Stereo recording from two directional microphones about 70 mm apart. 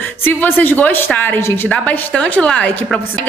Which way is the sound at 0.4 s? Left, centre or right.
Left.